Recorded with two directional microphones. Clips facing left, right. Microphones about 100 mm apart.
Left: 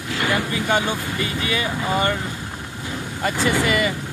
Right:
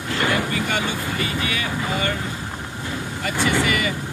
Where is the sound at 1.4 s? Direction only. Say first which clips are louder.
Left 2 dB; 25° left (ahead or behind).